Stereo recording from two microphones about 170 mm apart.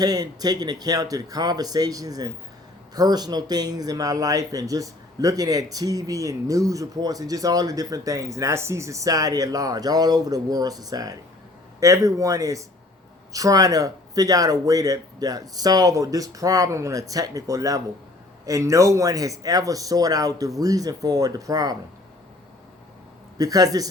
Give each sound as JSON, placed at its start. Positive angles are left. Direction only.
{"t": 0.0, "sound": "speech", "side_deg": -20}
{"t": 23.4, "sound": "speech", "side_deg": -20}